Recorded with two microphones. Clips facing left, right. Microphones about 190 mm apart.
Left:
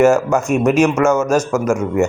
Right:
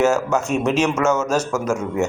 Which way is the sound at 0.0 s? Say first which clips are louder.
Left 5 dB; 10° left (ahead or behind).